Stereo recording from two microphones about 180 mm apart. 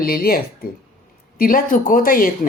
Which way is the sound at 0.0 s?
55° left (ahead or behind).